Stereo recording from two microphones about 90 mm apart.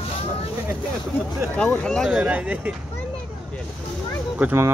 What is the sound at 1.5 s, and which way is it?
Speech, 15° left (ahead or behind).